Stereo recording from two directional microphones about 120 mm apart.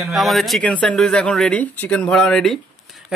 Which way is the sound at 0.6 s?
10° left (ahead or behind).